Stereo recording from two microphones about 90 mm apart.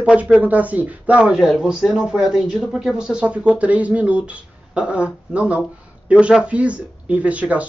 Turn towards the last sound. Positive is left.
turn(degrees=-15)  # may be behind; listen again after turning